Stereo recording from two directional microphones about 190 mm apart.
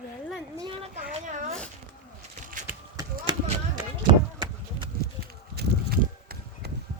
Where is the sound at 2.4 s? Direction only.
45° right (ahead or behind).